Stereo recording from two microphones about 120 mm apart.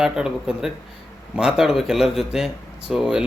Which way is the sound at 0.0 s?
5° right (ahead or behind).